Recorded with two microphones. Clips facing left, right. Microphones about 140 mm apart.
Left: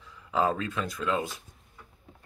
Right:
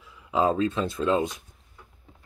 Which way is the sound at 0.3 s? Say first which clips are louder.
Right 4 dB; 20° right (ahead or behind).